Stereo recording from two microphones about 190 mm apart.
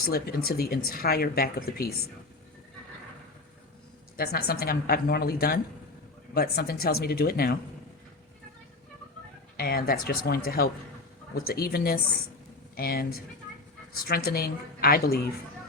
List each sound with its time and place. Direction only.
0.0 s speech: 55° left (ahead or behind)
4.2 s speech: 55° left (ahead or behind)
9.6 s speech: 55° left (ahead or behind)